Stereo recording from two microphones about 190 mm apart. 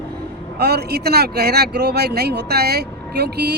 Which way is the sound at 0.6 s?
60° right (ahead or behind).